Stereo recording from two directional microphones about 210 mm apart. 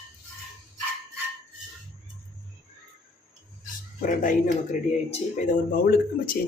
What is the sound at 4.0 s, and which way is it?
Speech, 40° left (ahead or behind).